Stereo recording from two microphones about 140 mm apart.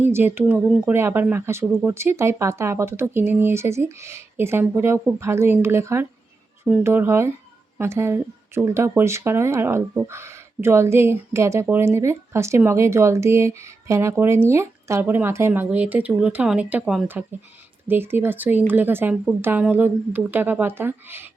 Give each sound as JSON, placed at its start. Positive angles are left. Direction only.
{"t": 0.0, "sound": "speech", "side_deg": -15}